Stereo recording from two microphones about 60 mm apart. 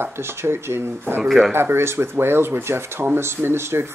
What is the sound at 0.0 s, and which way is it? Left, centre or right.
Speech, right.